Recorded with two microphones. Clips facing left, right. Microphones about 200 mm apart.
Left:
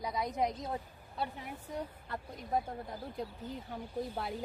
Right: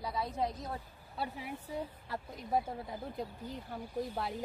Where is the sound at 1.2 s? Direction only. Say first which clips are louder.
Even; centre (ahead or behind).